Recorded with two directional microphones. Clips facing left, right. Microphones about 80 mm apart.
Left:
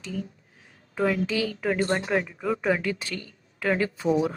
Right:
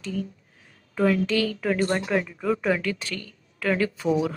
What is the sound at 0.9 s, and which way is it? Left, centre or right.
Speech, centre.